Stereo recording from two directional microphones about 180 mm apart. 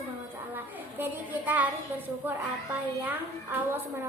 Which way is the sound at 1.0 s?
10° right (ahead or behind).